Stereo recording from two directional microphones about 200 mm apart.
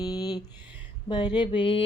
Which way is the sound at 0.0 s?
20° left (ahead or behind).